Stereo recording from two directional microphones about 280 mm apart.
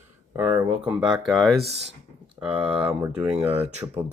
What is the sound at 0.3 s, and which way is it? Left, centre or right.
Speech, centre.